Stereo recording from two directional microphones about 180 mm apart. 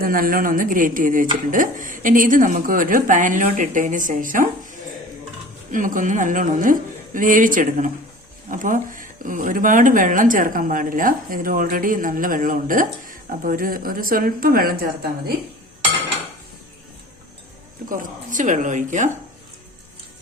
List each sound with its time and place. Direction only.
0.0 s speech: 50° right (ahead or behind)
5.7 s speech: 45° right (ahead or behind)
17.8 s speech: 45° right (ahead or behind)